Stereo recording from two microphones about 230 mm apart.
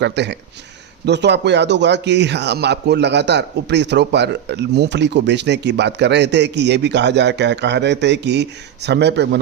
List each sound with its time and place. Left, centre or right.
0.0 s a man's voice: right